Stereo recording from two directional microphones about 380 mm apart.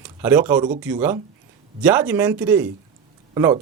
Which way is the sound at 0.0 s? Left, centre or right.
Centre.